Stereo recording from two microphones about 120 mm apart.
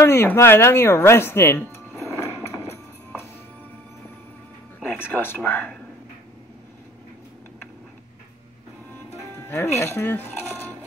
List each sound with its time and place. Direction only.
0.0 s speech: 20° left (ahead or behind)
2.7 s music: 20° left (ahead or behind)
4.8 s speech: 20° left (ahead or behind)
9.5 s speech: 20° left (ahead or behind)